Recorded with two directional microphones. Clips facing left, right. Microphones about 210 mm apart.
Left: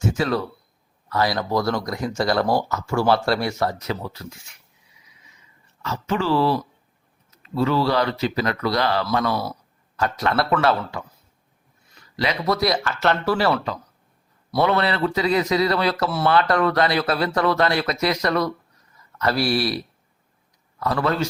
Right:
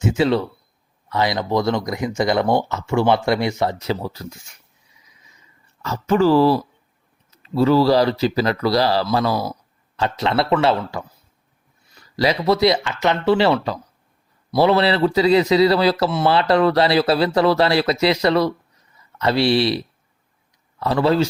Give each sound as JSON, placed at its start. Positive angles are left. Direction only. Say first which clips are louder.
{"t": 0.1, "sound": "speech", "louder": "right 5 dB", "side_deg": -25}
{"t": 5.8, "sound": "speech", "louder": "right 7 dB", "side_deg": -40}
{"t": 12.1, "sound": "speech", "louder": "right 5 dB", "side_deg": -35}